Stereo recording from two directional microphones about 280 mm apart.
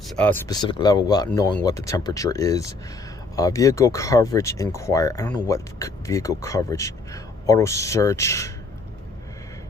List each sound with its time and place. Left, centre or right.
0.1 s speech: centre